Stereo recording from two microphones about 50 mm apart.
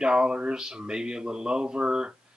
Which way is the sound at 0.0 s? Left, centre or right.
Centre.